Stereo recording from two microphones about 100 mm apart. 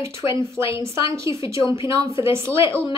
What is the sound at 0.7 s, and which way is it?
A woman's voice, 30° right (ahead or behind).